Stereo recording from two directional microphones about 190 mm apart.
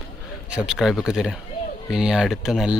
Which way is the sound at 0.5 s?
5° right (ahead or behind).